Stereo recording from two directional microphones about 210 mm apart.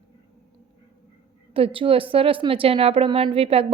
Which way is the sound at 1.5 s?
25° right (ahead or behind).